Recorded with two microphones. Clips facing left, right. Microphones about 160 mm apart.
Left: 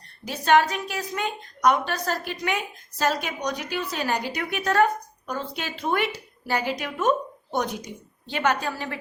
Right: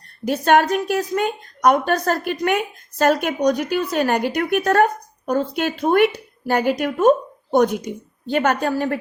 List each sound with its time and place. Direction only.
0.3 s a woman's voice: 50° right (ahead or behind)